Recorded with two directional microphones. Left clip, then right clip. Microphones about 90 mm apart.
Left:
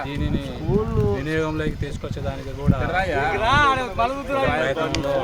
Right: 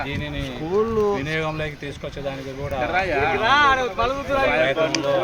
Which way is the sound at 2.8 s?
30° left (ahead or behind).